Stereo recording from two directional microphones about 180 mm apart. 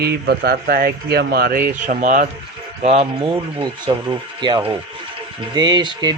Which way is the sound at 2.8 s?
35° right (ahead or behind).